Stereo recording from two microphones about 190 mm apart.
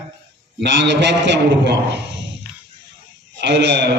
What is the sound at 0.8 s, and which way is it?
A man's voice, 70° right (ahead or behind).